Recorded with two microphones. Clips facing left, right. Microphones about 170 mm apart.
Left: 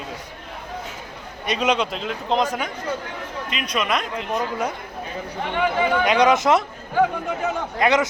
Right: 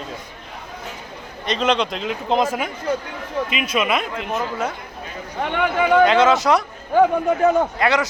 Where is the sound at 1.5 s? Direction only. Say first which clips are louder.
Right 1 dB; 10° left (ahead or behind).